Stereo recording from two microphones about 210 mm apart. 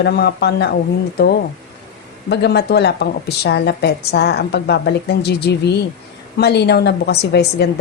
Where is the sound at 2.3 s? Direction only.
50° left (ahead or behind).